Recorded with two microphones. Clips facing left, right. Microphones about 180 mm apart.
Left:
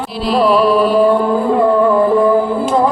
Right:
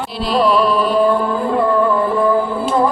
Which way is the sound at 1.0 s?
25° left (ahead or behind).